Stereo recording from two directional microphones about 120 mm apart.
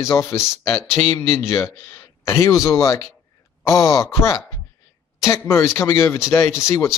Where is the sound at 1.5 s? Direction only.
25° left (ahead or behind).